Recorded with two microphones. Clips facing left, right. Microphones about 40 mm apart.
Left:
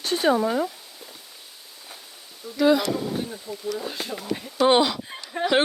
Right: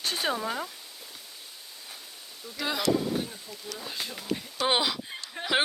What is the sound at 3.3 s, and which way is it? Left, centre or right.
Speech, centre.